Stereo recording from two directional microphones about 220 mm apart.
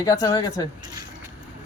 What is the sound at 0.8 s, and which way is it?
Speech, 20° right (ahead or behind).